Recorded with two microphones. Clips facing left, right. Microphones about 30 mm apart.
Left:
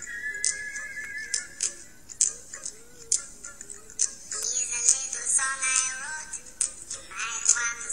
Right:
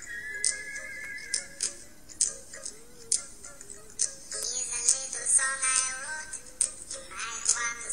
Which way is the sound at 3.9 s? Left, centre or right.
Right.